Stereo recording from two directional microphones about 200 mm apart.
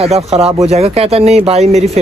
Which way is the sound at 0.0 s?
30° right (ahead or behind).